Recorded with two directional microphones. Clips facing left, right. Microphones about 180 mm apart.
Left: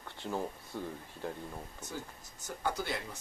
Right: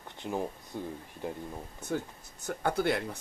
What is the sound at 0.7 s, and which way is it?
Speech, 20° right (ahead or behind).